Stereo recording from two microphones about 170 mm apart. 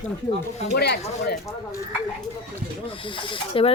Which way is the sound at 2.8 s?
30° left (ahead or behind).